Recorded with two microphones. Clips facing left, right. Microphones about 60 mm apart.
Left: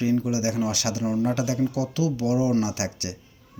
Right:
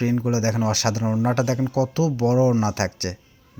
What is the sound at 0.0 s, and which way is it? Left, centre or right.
Speech, right.